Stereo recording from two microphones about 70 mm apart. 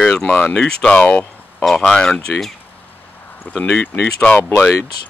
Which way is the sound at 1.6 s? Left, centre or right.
Centre.